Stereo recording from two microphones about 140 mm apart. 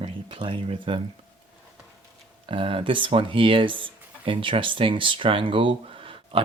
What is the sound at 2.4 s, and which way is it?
Speech, 40° right (ahead or behind).